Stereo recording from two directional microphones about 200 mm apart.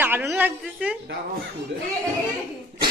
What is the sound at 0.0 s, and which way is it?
Speech, 10° right (ahead or behind).